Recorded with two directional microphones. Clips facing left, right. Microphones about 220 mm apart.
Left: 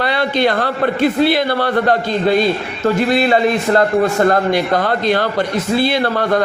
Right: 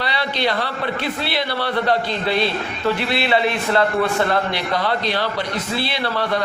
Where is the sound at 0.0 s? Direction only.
50° left (ahead or behind).